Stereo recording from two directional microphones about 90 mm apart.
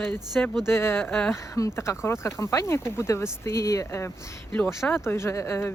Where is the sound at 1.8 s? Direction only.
30° left (ahead or behind).